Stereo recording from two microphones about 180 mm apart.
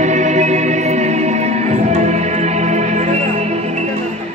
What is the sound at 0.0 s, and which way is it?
Music, 40° right (ahead or behind).